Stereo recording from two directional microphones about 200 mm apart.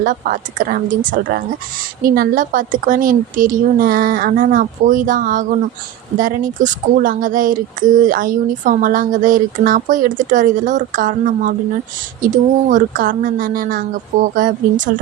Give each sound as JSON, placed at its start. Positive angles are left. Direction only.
{"t": 0.0, "sound": "a woman's voice", "side_deg": -40}